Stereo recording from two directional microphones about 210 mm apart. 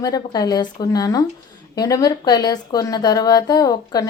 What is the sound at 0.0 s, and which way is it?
A woman's voice, 20° left (ahead or behind).